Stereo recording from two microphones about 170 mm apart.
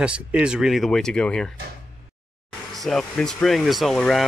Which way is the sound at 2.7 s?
Centre (ahead or behind).